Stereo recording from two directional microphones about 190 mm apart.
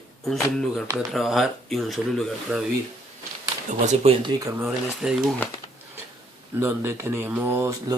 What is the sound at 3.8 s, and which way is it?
Speech, 35° right (ahead or behind).